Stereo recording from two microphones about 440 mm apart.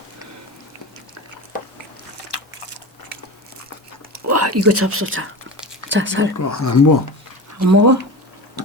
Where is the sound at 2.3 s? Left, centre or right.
Left.